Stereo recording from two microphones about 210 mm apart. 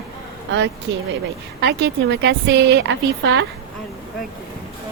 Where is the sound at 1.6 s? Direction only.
55° right (ahead or behind).